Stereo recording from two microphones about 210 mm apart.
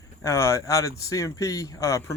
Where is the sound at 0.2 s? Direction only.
15° left (ahead or behind).